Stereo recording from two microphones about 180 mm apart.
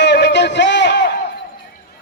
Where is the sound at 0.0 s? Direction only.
70° left (ahead or behind).